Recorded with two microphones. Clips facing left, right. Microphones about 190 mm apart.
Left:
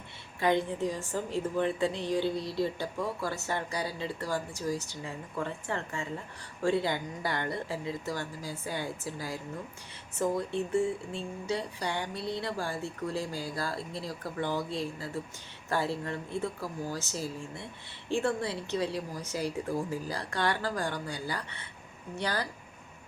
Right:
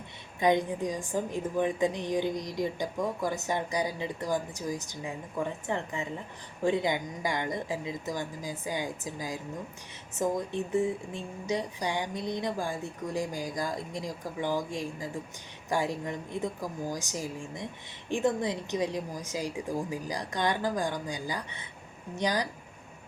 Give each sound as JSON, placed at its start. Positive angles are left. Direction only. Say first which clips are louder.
{"t": 0.3, "sound": "a woman's voice", "louder": "right 2 dB", "side_deg": -15}